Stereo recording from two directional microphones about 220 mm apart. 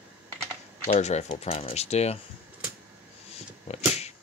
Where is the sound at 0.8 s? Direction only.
30° left (ahead or behind).